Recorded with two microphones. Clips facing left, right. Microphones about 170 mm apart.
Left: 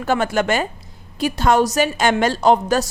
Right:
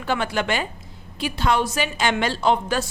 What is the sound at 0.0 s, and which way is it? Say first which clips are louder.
A woman's voice: left 5 dB; 45° left (ahead or behind).